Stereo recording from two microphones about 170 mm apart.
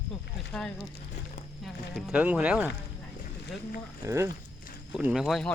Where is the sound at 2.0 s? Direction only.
5° right (ahead or behind).